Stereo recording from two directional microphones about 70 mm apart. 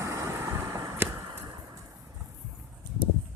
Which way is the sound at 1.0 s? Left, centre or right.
Right.